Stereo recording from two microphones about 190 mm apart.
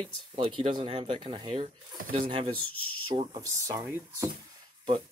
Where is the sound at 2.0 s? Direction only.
45° right (ahead or behind).